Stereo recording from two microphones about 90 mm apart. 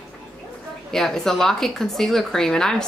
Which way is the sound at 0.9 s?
5° left (ahead or behind).